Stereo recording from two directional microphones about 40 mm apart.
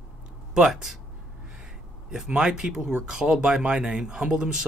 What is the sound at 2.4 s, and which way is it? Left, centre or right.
Speech, centre.